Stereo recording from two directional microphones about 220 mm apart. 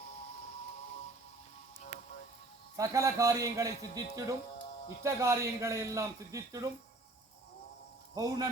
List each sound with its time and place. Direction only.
2.7 s a man's voice: 15° right (ahead or behind)
8.1 s a man's voice: 15° right (ahead or behind)